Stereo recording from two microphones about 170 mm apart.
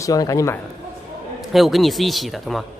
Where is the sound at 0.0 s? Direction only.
20° left (ahead or behind).